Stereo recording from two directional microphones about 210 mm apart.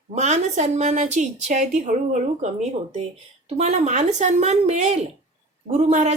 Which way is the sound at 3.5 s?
35° right (ahead or behind).